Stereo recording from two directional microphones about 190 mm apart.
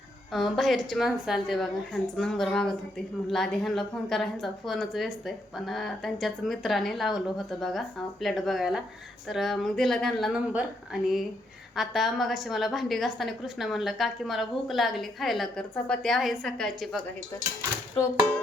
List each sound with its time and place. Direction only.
0.3 s a woman's voice: centre (ahead or behind)
11.8 s a woman's voice: centre (ahead or behind)